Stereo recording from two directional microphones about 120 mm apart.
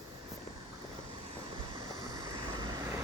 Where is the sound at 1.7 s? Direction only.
30° right (ahead or behind).